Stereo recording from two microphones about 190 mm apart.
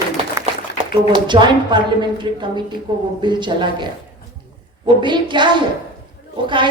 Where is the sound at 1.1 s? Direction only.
25° right (ahead or behind).